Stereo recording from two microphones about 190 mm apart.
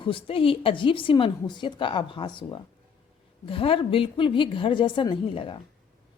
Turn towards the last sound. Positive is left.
turn(degrees=25)  # may be behind; listen again after turning